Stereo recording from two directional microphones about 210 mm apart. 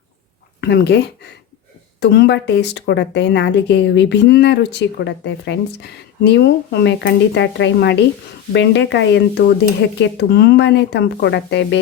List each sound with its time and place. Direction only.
0.6 s speech: 50° left (ahead or behind)